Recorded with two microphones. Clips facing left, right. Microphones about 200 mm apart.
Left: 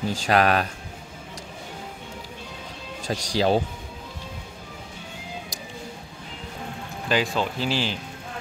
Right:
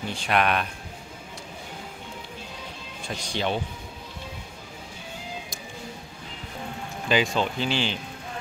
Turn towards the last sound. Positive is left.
turn(degrees=0)  # may be behind; listen again after turning